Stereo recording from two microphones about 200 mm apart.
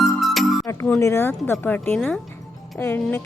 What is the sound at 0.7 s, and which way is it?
Speech, 15° left (ahead or behind).